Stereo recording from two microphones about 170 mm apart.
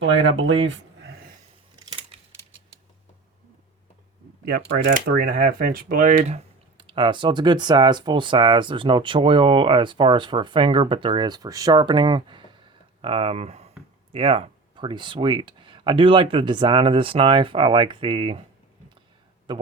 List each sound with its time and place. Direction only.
0.0 s speech: 90° right
1.8 s scissors: 30° right (ahead or behind)
4.9 s speech: 50° right (ahead or behind)
6.2 s speech: 35° right (ahead or behind)
19.5 s speech: 30° right (ahead or behind)